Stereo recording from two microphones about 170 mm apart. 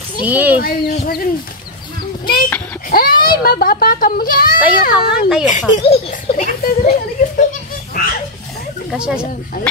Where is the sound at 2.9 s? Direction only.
60° left (ahead or behind).